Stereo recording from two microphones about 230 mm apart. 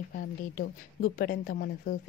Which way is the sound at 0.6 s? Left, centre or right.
Left.